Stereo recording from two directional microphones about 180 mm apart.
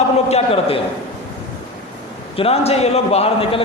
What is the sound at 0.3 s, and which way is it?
Speech, 35° left (ahead or behind).